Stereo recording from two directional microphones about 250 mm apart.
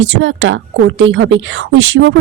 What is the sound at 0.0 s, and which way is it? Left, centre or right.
A woman's voice, right.